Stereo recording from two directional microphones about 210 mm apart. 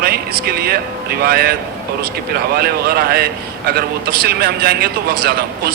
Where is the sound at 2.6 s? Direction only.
45° right (ahead or behind).